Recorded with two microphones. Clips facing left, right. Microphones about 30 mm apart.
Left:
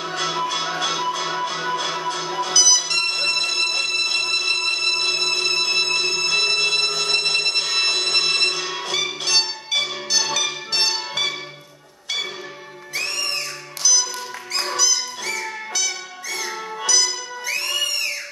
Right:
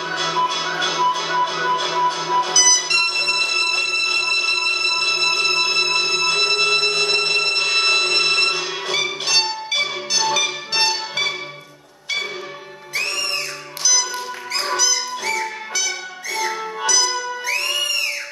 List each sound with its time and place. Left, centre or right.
0.0 s music: centre
2.5 s music: centre
12.9 s music: centre